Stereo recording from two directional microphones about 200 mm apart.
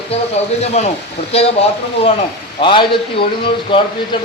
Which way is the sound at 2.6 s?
25° left (ahead or behind).